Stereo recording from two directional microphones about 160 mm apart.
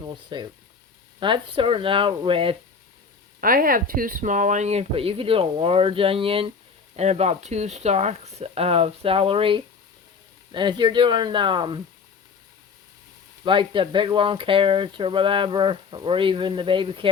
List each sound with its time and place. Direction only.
0.0 s speech: 25° right (ahead or behind)
3.4 s speech: 60° right (ahead or behind); by 11.8 s 30° right (ahead or behind)
13.4 s speech: 30° right (ahead or behind)